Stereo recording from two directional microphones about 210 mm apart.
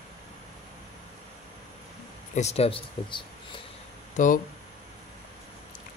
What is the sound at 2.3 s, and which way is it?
Speech, 30° left (ahead or behind).